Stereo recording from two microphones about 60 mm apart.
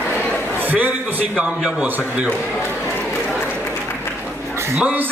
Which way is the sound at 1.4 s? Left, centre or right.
Centre.